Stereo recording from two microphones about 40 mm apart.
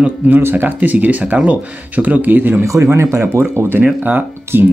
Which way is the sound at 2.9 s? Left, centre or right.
Right.